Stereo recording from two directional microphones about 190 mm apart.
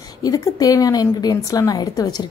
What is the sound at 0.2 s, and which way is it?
A woman's voice, 20° left (ahead or behind).